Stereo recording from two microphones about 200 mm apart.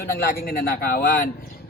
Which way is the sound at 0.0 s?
50° left (ahead or behind).